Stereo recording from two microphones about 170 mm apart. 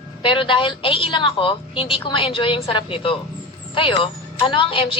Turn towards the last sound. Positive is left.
turn(degrees=30)  # may be behind; listen again after turning